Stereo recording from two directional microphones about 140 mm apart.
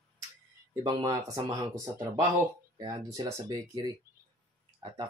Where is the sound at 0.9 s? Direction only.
30° right (ahead or behind).